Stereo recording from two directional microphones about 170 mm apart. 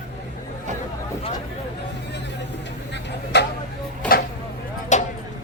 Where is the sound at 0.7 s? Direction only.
45° right (ahead or behind).